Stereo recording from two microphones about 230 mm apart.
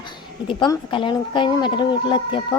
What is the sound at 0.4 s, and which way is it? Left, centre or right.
Speech, left.